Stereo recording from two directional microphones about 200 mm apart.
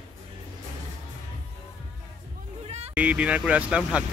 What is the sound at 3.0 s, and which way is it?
Speech, 5° right (ahead or behind).